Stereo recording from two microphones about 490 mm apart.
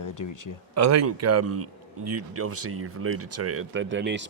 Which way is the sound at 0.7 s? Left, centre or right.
Right.